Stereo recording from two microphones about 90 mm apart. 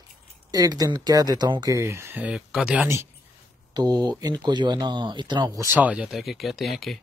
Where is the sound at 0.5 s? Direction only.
45° right (ahead or behind).